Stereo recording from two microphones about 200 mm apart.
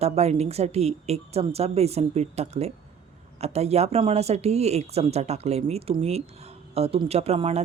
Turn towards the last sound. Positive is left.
turn(degrees=-30)  # may be behind; listen again after turning